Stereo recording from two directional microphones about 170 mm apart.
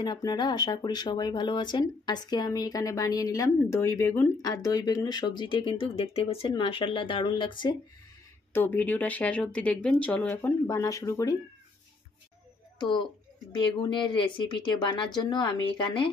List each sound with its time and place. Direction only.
0.0 s speech: 25° left (ahead or behind)
8.5 s speech: 10° left (ahead or behind)
14.1 s speech: 25° left (ahead or behind)